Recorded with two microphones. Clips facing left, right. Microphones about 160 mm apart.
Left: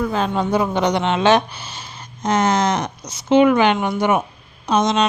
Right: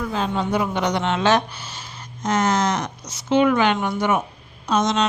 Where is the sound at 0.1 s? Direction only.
60° left (ahead or behind).